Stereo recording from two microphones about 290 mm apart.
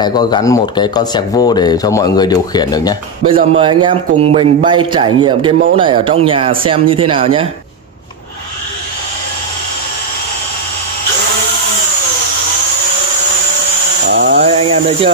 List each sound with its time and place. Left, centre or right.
0.0 s speech: centre
3.3 s speech: centre
14.0 s a sound: right
14.4 s speech: right